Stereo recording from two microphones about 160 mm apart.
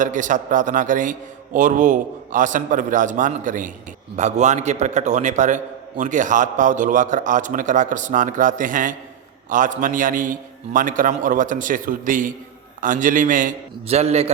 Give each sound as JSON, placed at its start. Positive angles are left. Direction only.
{"t": 0.0, "sound": "a man's voice", "side_deg": -55}
{"t": 13.8, "sound": "a man's voice", "side_deg": -40}